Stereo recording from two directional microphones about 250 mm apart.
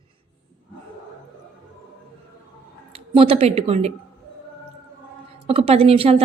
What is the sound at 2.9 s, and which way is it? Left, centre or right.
Speech, right.